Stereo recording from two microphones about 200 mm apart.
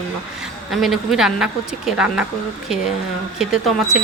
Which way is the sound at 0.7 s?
Centre (ahead or behind).